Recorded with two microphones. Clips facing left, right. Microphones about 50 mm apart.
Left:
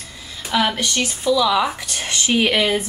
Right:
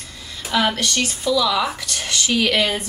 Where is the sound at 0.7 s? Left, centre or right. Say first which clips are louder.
Even; centre.